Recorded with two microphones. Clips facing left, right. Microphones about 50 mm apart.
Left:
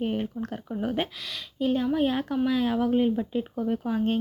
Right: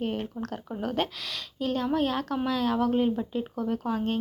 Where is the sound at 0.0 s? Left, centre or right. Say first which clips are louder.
Left 2 dB; centre.